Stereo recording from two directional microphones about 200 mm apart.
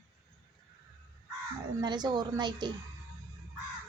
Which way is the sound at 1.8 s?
20° right (ahead or behind).